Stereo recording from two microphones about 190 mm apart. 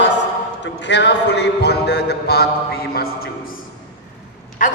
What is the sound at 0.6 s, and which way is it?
A man's voice, 65° left (ahead or behind).